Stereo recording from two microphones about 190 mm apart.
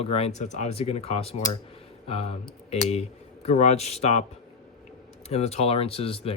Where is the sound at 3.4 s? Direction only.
35° left (ahead or behind).